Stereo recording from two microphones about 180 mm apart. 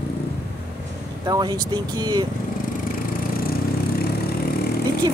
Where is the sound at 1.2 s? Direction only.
20° right (ahead or behind).